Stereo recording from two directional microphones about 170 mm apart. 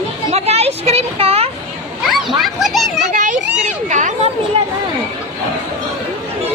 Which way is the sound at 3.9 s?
50° right (ahead or behind).